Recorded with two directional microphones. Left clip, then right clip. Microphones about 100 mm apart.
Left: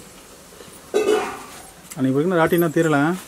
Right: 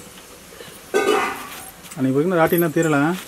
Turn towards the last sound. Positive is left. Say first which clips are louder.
# even
turn(degrees=20)  # may be behind; listen again after turning